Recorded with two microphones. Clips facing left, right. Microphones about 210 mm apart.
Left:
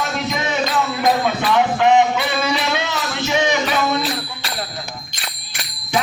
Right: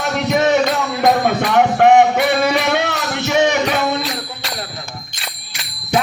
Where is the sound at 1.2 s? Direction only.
60° right (ahead or behind).